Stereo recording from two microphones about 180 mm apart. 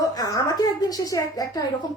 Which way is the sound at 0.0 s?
20° left (ahead or behind).